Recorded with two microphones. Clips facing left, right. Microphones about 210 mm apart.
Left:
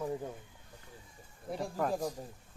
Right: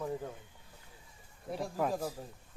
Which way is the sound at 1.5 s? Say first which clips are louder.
Even; 5° right (ahead or behind).